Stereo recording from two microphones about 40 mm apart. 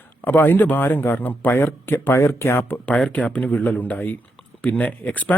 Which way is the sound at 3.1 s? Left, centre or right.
Left.